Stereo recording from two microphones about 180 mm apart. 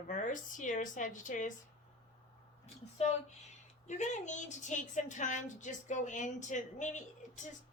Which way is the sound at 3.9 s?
40° left (ahead or behind).